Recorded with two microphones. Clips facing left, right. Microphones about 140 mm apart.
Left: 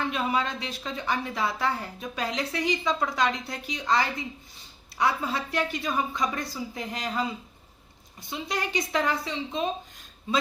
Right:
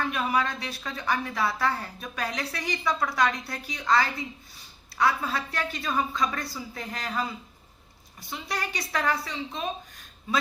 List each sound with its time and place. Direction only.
0.0 s a woman's voice: 20° left (ahead or behind)